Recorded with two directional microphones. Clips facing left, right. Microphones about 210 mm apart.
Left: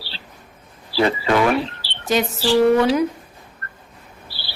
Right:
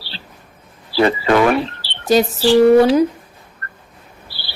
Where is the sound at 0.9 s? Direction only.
60° right (ahead or behind).